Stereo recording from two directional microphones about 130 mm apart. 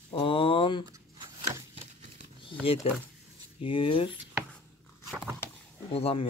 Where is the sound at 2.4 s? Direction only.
45° left (ahead or behind).